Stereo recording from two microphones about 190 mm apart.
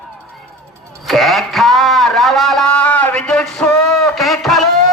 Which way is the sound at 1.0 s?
Centre (ahead or behind).